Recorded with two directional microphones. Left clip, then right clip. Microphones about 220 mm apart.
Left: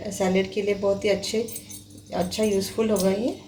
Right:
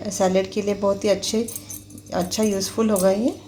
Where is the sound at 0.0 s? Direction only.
25° right (ahead or behind).